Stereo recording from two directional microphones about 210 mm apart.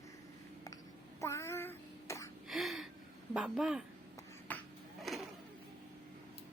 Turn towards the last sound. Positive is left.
turn(degrees=0)  # may be behind; listen again after turning